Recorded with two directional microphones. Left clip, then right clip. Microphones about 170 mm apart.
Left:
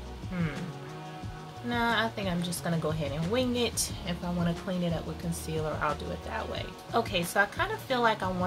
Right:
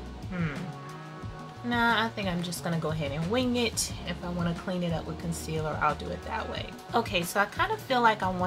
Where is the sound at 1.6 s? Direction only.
10° right (ahead or behind).